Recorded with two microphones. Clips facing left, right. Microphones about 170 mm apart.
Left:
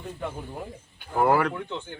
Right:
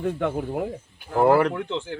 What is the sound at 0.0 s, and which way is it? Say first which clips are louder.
Speech: right 9 dB; 70° right (ahead or behind).